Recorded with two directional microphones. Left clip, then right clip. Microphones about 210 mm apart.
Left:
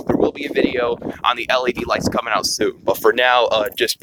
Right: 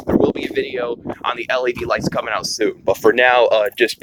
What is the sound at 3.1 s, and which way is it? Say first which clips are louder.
Speech: right 2 dB; 20° left (ahead or behind).